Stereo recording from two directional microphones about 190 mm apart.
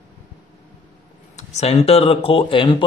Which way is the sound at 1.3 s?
35° left (ahead or behind).